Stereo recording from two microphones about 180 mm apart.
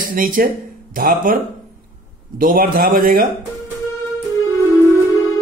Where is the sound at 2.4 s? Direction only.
50° right (ahead or behind).